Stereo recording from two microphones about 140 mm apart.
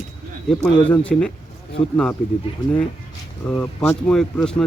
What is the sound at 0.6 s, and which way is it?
Speech, 10° left (ahead or behind).